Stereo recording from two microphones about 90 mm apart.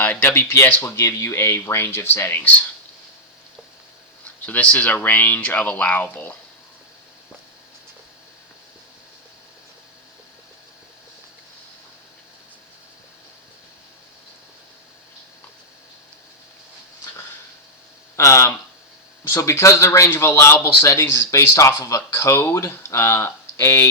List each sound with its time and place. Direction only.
0.0 s speech: 20° left (ahead or behind)
4.4 s speech: 15° left (ahead or behind)
18.2 s speech: 35° left (ahead or behind)